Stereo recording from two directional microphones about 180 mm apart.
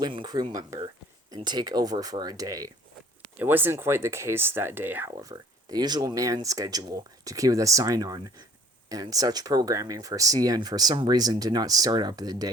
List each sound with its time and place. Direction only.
0.0 s speech: 25° right (ahead or behind)
5.1 s speech: 20° right (ahead or behind)